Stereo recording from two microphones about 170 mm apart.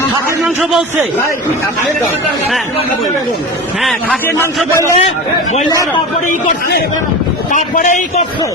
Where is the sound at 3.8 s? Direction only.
10° left (ahead or behind).